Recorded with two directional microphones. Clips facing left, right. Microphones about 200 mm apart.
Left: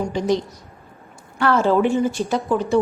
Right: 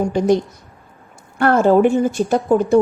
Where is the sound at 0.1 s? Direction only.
50° right (ahead or behind).